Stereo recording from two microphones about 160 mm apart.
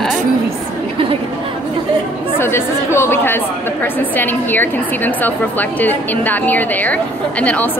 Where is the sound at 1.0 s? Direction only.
35° right (ahead or behind).